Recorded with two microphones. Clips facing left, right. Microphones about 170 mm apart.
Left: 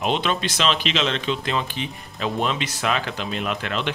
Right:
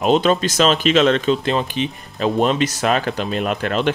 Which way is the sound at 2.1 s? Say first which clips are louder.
Right 7 dB; 40° right (ahead or behind).